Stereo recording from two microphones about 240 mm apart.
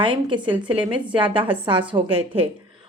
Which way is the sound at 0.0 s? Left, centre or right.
Right.